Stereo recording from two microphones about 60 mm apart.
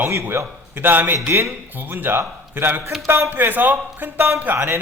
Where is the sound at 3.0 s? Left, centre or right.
Right.